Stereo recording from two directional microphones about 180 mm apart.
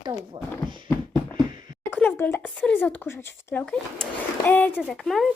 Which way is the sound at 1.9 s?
10° left (ahead or behind).